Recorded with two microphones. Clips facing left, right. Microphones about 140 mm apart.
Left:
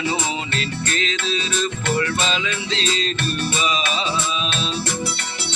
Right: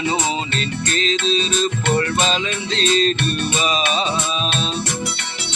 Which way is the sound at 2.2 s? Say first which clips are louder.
Right 2 dB; 40° right (ahead or behind).